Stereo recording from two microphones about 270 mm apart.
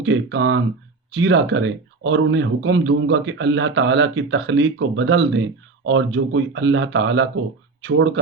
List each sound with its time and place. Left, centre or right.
0.0 s speech: right